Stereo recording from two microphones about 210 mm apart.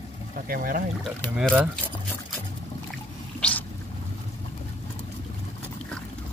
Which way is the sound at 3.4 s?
5° left (ahead or behind).